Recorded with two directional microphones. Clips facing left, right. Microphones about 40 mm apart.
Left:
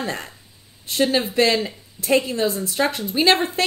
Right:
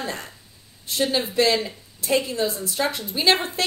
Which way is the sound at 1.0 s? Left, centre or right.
Left.